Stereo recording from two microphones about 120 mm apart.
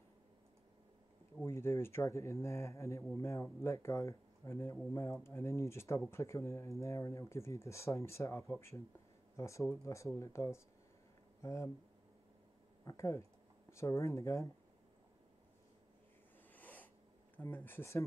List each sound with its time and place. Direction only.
1.4 s speech: 20° left (ahead or behind)
12.8 s speech: 25° left (ahead or behind)
16.5 s snort: 15° left (ahead or behind)
17.4 s speech: 15° left (ahead or behind)